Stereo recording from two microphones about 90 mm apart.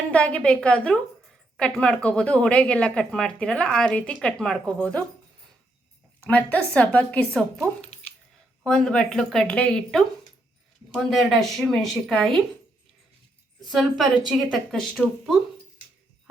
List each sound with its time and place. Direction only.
0.1 s speech: 15° left (ahead or behind)
6.1 s speech: 15° left (ahead or behind)
7.3 s a woman's voice: centre (ahead or behind)
13.6 s a woman's voice: centre (ahead or behind)